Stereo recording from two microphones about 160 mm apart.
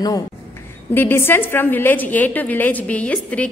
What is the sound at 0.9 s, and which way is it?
A woman's voice, 15° left (ahead or behind).